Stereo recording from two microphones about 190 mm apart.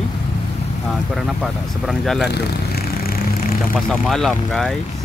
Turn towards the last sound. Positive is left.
turn(degrees=5)  # may be behind; listen again after turning